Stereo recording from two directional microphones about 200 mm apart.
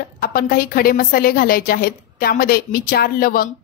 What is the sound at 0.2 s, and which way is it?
A woman's voice, 45° left (ahead or behind).